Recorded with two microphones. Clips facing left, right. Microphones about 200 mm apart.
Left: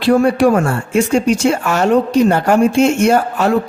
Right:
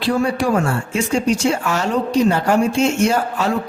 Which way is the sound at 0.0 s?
55° left (ahead or behind).